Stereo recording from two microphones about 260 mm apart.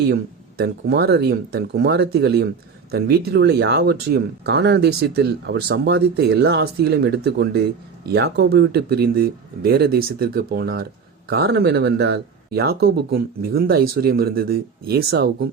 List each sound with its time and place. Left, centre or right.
0.1 s speech: right